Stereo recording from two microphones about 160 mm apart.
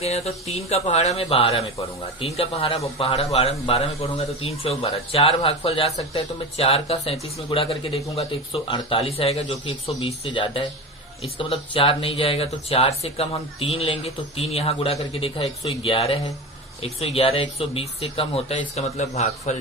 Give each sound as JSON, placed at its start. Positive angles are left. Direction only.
{"t": 0.0, "sound": "a man's voice", "side_deg": 40}